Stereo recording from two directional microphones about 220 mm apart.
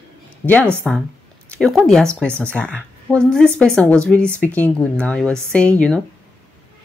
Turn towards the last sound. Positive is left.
turn(degrees=5)  # may be behind; listen again after turning